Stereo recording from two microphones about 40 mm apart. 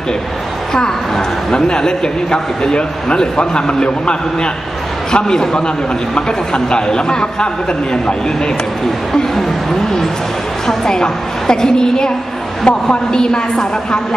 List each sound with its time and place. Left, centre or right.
0.7 s a woman's voice: centre
10.7 s a woman's voice: centre